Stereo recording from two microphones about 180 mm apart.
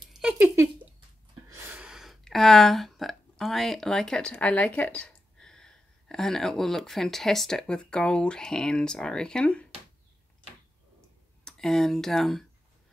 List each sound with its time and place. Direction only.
0.1 s a sound: 5° right (ahead or behind)
1.5 s speech: 10° right (ahead or behind); by 9.7 s 5° left (ahead or behind)
11.4 s speech: 5° left (ahead or behind)